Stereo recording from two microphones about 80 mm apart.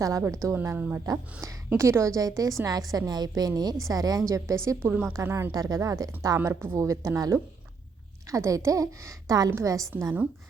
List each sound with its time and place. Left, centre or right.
0.2 s a woman's voice: right
0.8 s a woman's voice: right
1.0 s a woman's voice: right
4.9 s a woman's voice: centre
5.5 s a woman's voice: right
6.5 s a woman's voice: right
6.7 s a woman's voice: right